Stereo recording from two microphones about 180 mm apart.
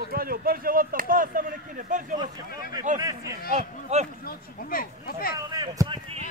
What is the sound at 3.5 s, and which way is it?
Speech, 40° right (ahead or behind).